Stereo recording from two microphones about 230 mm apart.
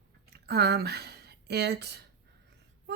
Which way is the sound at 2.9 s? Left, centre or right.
Right.